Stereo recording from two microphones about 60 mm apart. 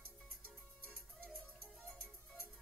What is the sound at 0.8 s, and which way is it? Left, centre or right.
Music, centre.